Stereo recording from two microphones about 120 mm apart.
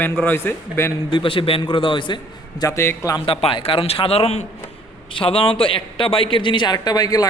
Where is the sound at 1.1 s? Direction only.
45° left (ahead or behind).